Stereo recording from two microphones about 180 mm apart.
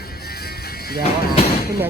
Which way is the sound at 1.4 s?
35° left (ahead or behind).